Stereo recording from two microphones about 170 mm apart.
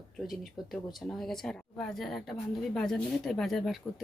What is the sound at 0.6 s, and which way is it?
Speech, centre (ahead or behind).